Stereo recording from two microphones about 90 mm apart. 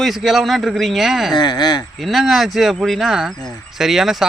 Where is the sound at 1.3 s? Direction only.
50° left (ahead or behind).